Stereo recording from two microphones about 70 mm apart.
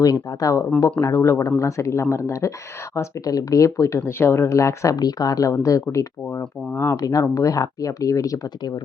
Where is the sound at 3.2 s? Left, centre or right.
Left.